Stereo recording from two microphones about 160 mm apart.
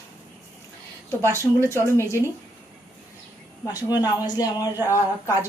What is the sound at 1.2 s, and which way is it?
Speech, 15° right (ahead or behind).